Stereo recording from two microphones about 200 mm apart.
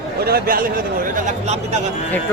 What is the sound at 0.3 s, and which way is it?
Speech, 50° right (ahead or behind).